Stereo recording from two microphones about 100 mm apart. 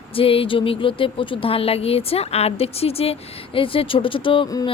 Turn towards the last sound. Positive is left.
turn(degrees=60)  # may be behind; listen again after turning